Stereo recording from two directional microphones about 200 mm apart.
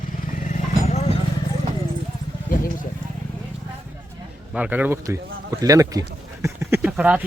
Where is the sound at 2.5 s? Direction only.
40° left (ahead or behind).